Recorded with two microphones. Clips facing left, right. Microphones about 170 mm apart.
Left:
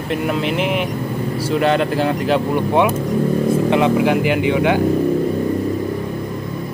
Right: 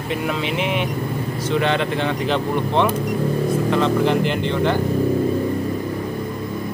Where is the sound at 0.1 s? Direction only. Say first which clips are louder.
Left 4 dB; centre (ahead or behind).